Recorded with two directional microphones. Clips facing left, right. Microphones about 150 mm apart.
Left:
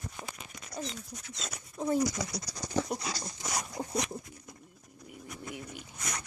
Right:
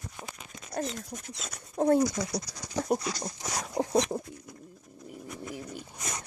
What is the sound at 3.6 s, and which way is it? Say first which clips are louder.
Dog: right 12 dB; 65° right (ahead or behind).